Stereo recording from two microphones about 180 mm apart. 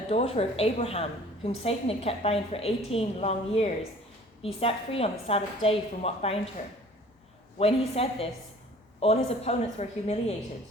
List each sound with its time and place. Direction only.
0.1 s a woman's voice: 35° left (ahead or behind)
7.6 s a woman's voice: 35° left (ahead or behind)